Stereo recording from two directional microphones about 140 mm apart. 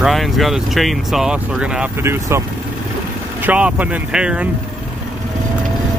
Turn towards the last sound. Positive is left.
turn(degrees=-5)  # may be behind; listen again after turning